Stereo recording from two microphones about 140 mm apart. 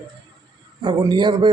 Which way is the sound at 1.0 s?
35° right (ahead or behind).